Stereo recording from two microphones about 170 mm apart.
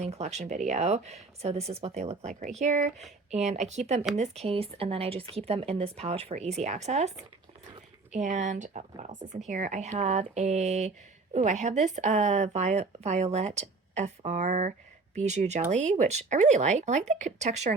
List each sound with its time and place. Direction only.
0.0 s speech: 40° right (ahead or behind)
8.1 s speech: 50° right (ahead or behind)